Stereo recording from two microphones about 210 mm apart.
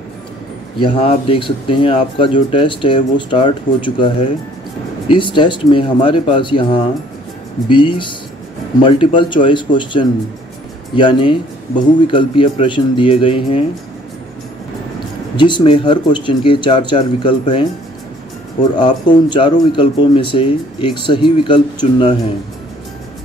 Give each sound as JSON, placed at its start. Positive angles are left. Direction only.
{"t": 0.7, "sound": "speech", "side_deg": 25}
{"t": 15.3, "sound": "speech", "side_deg": 20}
{"t": 18.8, "sound": "speech", "side_deg": 20}